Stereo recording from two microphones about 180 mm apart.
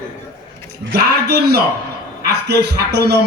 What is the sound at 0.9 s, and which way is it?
Speech, 65° right (ahead or behind).